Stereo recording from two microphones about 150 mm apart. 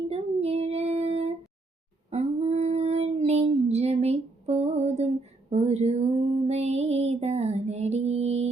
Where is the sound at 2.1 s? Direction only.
45° right (ahead or behind).